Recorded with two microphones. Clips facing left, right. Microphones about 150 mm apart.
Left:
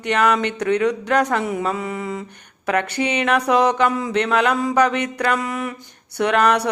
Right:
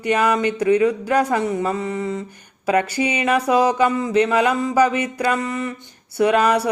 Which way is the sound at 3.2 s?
5° right (ahead or behind).